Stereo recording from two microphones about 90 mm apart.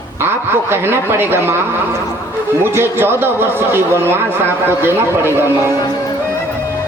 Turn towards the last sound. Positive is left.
turn(degrees=-25)  # may be behind; listen again after turning